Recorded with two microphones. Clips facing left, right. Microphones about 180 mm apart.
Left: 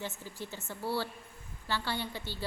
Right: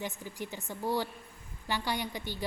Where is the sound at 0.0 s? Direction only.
15° right (ahead or behind).